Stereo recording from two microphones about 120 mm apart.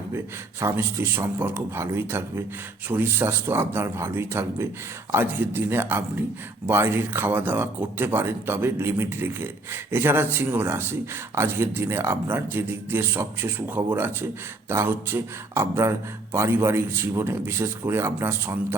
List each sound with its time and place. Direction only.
0.6 s a man's voice: 20° right (ahead or behind)